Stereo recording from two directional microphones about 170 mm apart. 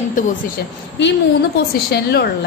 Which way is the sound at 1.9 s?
70° left (ahead or behind).